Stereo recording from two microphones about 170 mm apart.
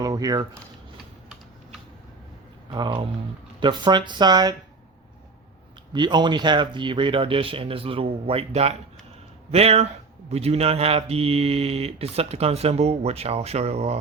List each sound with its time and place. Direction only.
0.0 s speech: 20° right (ahead or behind)
2.7 s speech: 30° right (ahead or behind)
5.9 s speech: 25° right (ahead or behind)